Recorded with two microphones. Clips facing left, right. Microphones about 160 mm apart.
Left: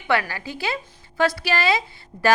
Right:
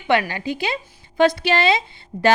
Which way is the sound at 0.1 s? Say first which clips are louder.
Right 4 dB; 20° right (ahead or behind).